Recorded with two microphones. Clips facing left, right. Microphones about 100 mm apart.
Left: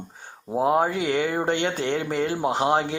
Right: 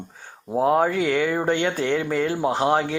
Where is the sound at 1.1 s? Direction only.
30° left (ahead or behind).